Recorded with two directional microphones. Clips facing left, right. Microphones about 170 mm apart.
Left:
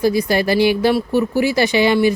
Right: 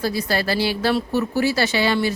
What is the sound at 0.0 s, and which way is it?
A woman's voice, 15° left (ahead or behind).